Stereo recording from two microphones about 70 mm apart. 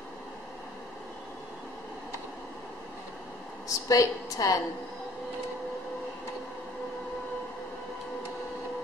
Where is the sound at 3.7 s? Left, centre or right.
Left.